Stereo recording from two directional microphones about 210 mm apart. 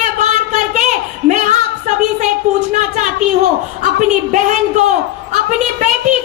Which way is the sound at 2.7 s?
35° right (ahead or behind).